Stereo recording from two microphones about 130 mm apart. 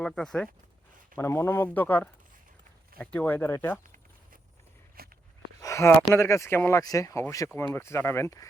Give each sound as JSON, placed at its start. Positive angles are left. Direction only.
{"t": 0.0, "sound": "speech", "side_deg": 5}
{"t": 1.1, "sound": "speech", "side_deg": 20}
{"t": 5.6, "sound": "a sound", "side_deg": 25}
{"t": 6.1, "sound": "speech", "side_deg": 20}